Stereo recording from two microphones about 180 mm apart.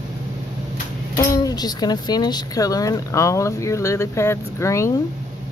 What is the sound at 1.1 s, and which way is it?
Speech, 20° left (ahead or behind).